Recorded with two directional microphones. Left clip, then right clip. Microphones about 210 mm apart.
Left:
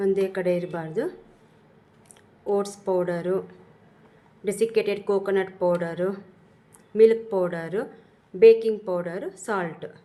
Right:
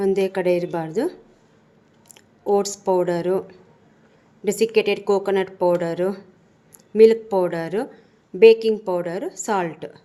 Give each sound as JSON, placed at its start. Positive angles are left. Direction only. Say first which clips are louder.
{"t": 0.0, "sound": "speech", "louder": "right 3 dB", "side_deg": -35}
{"t": 2.5, "sound": "speech", "louder": "right 5 dB", "side_deg": -30}
{"t": 4.4, "sound": "speech", "louder": "right 4 dB", "side_deg": -30}